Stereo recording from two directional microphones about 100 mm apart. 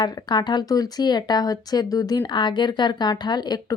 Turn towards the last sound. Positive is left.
turn(degrees=40)  # may be behind; listen again after turning